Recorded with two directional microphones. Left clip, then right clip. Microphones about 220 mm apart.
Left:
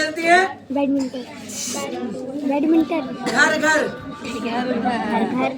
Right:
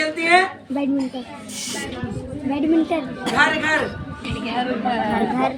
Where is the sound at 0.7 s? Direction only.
25° right (ahead or behind).